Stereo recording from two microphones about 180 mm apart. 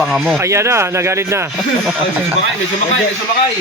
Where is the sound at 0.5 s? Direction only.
15° right (ahead or behind).